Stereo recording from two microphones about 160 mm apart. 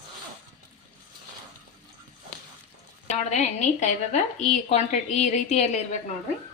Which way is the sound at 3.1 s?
45° left (ahead or behind).